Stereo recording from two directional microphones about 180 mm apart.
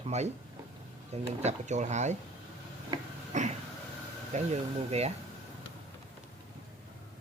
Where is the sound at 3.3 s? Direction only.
40° right (ahead or behind).